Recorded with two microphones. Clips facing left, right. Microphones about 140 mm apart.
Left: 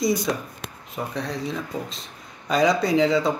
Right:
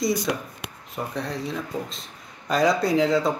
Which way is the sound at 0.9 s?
Centre (ahead or behind).